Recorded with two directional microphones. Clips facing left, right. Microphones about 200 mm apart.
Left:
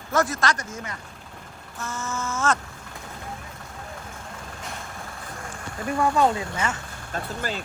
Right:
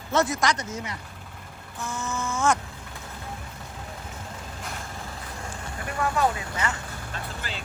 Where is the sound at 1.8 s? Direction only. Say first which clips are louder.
Even; 15° right (ahead or behind).